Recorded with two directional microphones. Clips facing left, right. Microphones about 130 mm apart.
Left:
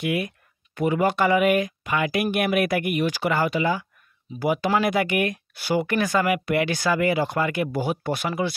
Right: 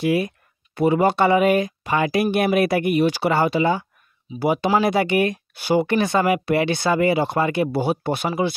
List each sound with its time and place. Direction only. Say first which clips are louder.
0.0 s speech: right 5 dB; 30° right (ahead or behind)